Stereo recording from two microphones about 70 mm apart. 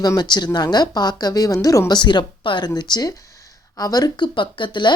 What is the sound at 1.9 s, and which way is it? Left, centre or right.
Speech, left.